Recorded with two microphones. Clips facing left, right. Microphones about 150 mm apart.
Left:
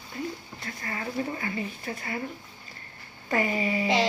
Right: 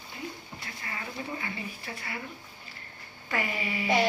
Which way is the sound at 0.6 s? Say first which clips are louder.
Left 6 dB; 40° left (ahead or behind).